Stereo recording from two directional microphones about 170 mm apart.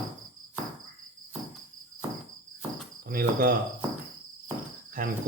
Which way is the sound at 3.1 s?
60° right (ahead or behind).